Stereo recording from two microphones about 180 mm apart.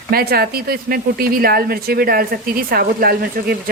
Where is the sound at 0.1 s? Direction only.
60° right (ahead or behind).